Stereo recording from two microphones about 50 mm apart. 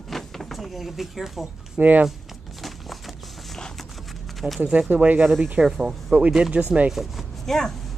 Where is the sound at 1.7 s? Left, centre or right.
Right.